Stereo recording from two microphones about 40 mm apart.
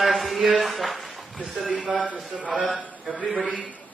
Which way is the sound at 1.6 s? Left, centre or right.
Right.